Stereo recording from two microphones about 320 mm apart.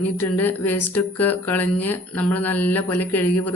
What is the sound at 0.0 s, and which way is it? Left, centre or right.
Speech, centre.